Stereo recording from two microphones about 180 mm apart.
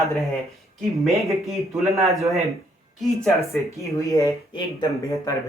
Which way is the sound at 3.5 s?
15° left (ahead or behind).